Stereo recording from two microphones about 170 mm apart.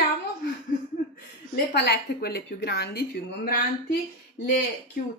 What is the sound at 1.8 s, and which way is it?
A woman's voice, 70° left (ahead or behind).